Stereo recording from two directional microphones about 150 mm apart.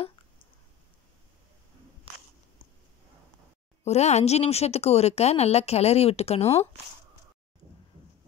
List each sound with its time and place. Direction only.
3.8 s a woman's voice: 50° left (ahead or behind)